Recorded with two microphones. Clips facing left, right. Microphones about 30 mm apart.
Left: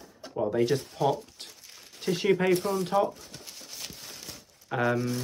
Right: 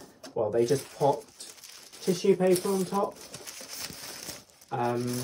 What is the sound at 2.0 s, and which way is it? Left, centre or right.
Speech, left.